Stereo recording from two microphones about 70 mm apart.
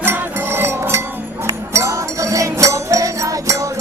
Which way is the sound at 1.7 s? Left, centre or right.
Right.